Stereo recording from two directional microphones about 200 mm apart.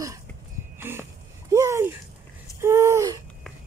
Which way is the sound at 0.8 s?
10° right (ahead or behind).